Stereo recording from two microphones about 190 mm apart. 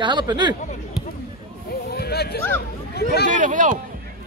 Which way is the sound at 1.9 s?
55° left (ahead or behind).